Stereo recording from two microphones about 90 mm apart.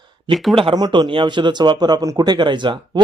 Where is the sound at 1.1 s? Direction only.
60° right (ahead or behind).